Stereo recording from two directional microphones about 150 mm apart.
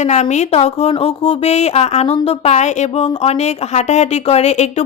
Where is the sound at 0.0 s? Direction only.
50° left (ahead or behind).